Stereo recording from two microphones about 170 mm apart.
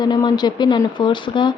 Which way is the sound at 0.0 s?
25° left (ahead or behind).